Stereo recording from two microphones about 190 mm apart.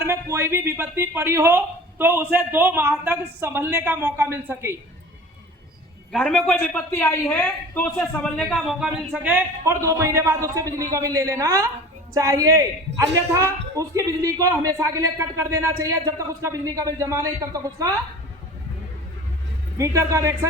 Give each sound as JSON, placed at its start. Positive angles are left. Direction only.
{"t": 0.0, "sound": "speech", "side_deg": -15}
{"t": 6.1, "sound": "a woman's voice", "side_deg": 5}
{"t": 19.8, "sound": "speech", "side_deg": -15}